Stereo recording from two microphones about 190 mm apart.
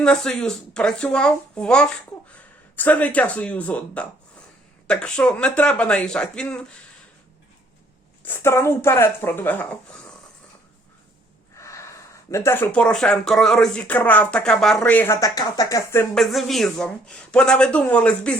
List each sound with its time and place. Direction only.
0.0 s speech: 5° left (ahead or behind)
8.2 s speech: 10° left (ahead or behind)
11.5 s speech: 15° left (ahead or behind)
16.1 s speech: centre (ahead or behind)